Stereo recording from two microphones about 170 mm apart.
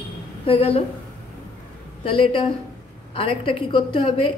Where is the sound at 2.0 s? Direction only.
30° left (ahead or behind).